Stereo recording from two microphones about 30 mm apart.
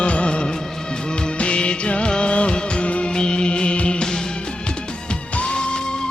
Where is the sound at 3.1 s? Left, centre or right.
Left.